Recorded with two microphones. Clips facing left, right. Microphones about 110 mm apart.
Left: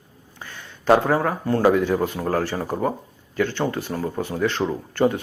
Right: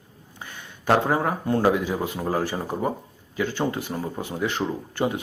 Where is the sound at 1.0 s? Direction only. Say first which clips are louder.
Left 2 dB; 20° right (ahead or behind).